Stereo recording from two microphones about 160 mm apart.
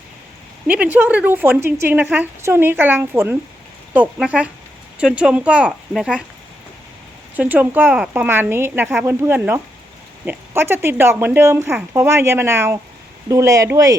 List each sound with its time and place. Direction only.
0.7 s a woman's voice: 10° right (ahead or behind)
7.3 s a woman's voice: 10° right (ahead or behind)